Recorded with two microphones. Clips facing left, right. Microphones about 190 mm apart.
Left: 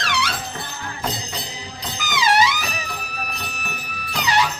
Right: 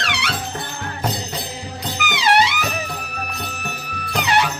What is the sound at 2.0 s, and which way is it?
Music, 65° right (ahead or behind).